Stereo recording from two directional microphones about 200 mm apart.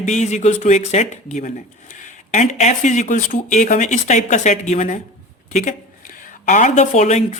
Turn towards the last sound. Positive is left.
turn(degrees=35)  # may be behind; listen again after turning